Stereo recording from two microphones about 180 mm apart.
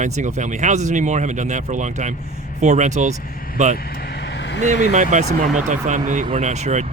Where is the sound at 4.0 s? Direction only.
65° left (ahead or behind).